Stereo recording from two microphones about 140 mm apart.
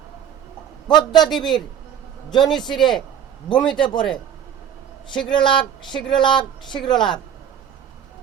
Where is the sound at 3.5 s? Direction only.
35° left (ahead or behind).